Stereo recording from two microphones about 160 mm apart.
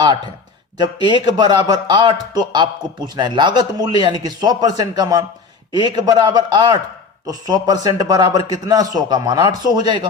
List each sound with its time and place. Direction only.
0.8 s a man's voice: 25° right (ahead or behind)